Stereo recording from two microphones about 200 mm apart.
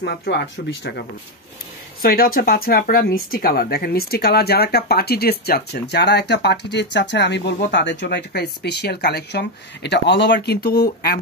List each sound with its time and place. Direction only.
0.0 s speech: 55° left (ahead or behind)
2.0 s speech: 45° left (ahead or behind)